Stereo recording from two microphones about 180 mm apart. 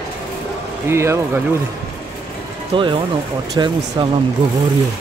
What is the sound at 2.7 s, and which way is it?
Speech, 30° right (ahead or behind).